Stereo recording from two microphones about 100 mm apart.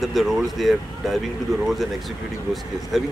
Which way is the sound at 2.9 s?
Centre (ahead or behind).